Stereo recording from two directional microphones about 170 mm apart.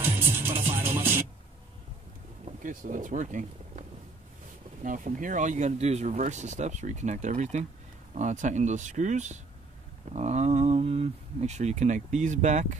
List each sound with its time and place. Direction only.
0.0 s music: 10° right (ahead or behind)
2.4 s speech: 50° right (ahead or behind)
4.8 s speech: 50° right (ahead or behind)